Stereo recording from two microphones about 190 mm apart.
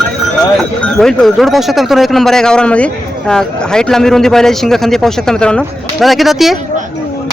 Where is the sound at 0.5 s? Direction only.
5° left (ahead or behind).